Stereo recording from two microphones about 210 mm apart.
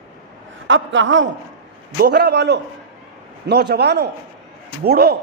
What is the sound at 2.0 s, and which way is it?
A man's voice, 50° right (ahead or behind).